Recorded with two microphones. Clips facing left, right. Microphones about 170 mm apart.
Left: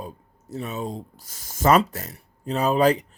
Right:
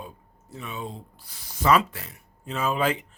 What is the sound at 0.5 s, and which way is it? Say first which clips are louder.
Speech: left 6 dB; 40° left (ahead or behind).